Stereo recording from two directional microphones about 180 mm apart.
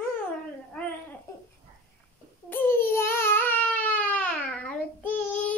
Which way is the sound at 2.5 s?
10° left (ahead or behind).